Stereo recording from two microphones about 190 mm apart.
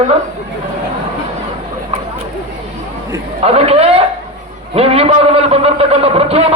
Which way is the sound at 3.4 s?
30° right (ahead or behind).